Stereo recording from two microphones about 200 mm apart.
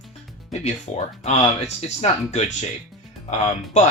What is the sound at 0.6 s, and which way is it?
Speech, 35° left (ahead or behind).